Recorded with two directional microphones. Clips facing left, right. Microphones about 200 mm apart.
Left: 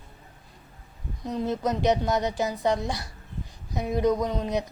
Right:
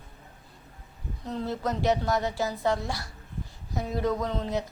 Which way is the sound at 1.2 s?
15° left (ahead or behind).